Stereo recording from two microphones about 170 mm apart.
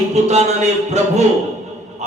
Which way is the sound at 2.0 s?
40° right (ahead or behind).